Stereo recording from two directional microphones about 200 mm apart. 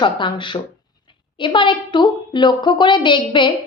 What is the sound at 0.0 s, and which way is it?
A woman's voice, 25° left (ahead or behind).